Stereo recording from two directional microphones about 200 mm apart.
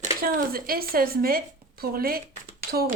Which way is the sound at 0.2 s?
45° right (ahead or behind).